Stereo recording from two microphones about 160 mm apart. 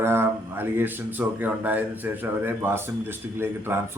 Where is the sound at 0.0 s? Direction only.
15° right (ahead or behind).